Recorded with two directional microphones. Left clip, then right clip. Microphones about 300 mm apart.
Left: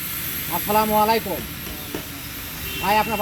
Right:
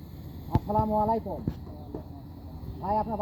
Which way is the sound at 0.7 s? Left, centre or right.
Left.